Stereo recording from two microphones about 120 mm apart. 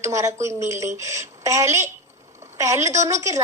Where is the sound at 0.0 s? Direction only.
25° right (ahead or behind).